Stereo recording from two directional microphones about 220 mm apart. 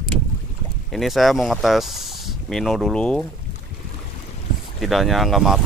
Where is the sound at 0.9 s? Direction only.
Centre (ahead or behind).